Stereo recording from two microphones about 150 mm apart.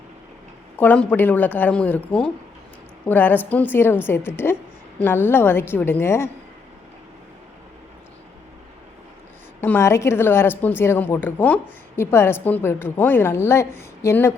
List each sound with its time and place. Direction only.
0.8 s a woman's voice: 10° left (ahead or behind)
9.6 s a woman's voice: 15° left (ahead or behind)